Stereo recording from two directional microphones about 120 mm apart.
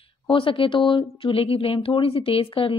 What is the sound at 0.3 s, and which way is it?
Speech, 45° left (ahead or behind).